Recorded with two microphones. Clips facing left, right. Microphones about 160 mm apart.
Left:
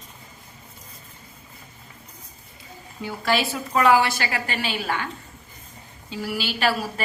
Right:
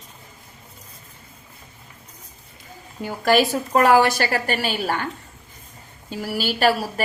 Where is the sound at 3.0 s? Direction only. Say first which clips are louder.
Right 6 dB; 45° right (ahead or behind).